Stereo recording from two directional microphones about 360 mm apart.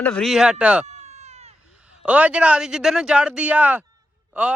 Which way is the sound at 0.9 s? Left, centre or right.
Centre.